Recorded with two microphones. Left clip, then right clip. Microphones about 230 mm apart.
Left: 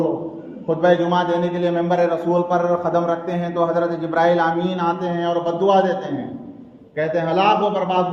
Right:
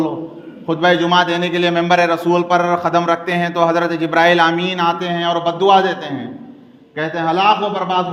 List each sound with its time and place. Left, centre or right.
0.7 s a man's voice: right